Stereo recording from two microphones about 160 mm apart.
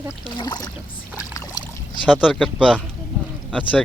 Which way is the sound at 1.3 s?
20° left (ahead or behind).